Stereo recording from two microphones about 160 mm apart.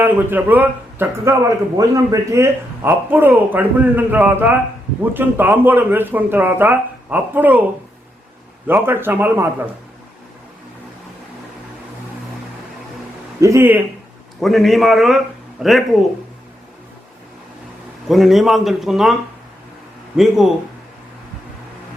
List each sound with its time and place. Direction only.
0.0 s a man's voice: 10° right (ahead or behind)
8.6 s a man's voice: 15° right (ahead or behind)
13.4 s a man's voice: 15° right (ahead or behind)
14.4 s a man's voice: centre (ahead or behind)
18.1 s a man's voice: centre (ahead or behind)
20.1 s a man's voice: centre (ahead or behind)